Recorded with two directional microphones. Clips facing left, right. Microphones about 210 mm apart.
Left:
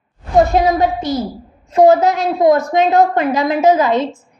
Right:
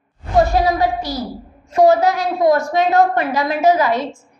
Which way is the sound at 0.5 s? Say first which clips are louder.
Left 2 dB; 20° left (ahead or behind).